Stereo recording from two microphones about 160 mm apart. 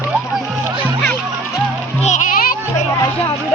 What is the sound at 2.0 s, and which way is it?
Music, 55° left (ahead or behind).